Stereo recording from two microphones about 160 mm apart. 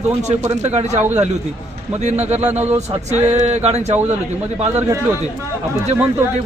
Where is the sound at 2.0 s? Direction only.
45° right (ahead or behind).